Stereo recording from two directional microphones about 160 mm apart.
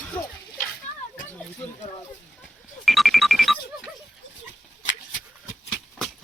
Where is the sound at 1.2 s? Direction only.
10° left (ahead or behind).